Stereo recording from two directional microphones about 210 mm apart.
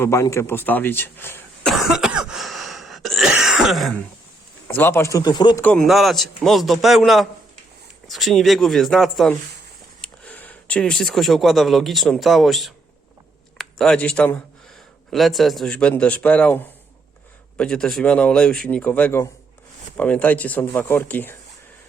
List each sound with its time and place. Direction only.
0.0 s speech: 15° left (ahead or behind)
1.7 s cough: centre (ahead or behind)
4.7 s speech: 10° left (ahead or behind)
5.6 s speech: centre (ahead or behind)